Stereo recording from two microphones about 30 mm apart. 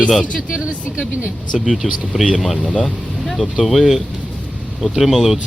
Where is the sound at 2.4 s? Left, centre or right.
Centre.